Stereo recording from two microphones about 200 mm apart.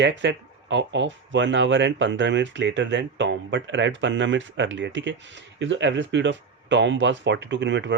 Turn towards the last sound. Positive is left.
turn(degrees=-65)  # may be behind; listen again after turning